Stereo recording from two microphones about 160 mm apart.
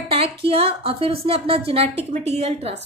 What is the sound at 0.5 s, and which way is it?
A woman's voice, 35° right (ahead or behind).